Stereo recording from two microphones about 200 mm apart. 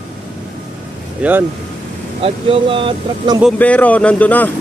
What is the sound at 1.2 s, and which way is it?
Speech, 5° right (ahead or behind).